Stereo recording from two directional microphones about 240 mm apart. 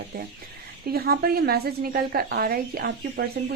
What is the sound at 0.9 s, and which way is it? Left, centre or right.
Speech, right.